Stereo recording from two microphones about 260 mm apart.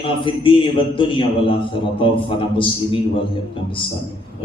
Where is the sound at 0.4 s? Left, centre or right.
Centre.